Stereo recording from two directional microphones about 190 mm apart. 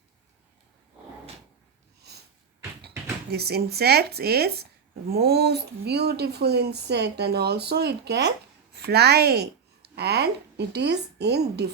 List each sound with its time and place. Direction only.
3.2 s speech: 55° right (ahead or behind)